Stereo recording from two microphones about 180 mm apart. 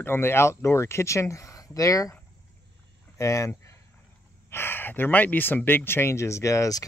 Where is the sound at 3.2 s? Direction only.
15° left (ahead or behind).